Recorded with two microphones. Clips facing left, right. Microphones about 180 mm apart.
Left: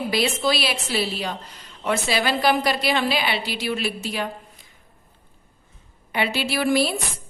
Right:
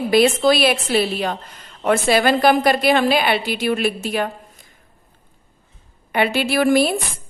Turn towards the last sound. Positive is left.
turn(degrees=-50)  # may be behind; listen again after turning